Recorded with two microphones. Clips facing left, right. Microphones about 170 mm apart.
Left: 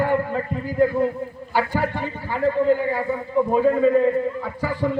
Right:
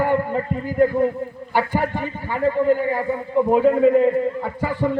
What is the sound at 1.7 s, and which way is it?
Speech, 50° right (ahead or behind).